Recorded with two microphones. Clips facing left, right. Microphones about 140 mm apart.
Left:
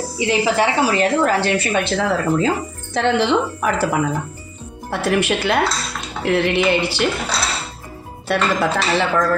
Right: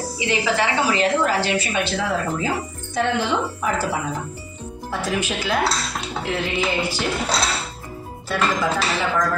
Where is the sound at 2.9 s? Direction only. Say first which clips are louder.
Left 5 dB; 80° left.